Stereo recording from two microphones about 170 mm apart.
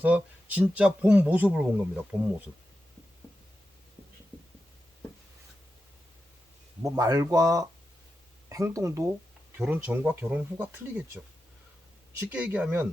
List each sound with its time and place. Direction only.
0.0 s speech: 10° right (ahead or behind)
6.8 s speech: 20° right (ahead or behind)
12.3 s speech: 10° right (ahead or behind)